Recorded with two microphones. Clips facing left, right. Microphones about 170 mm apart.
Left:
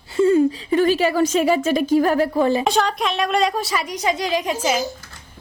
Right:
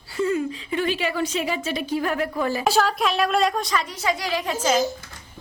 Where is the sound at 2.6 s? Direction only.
5° right (ahead or behind).